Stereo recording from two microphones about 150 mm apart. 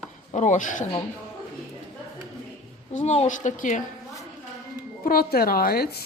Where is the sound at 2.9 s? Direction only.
50° left (ahead or behind).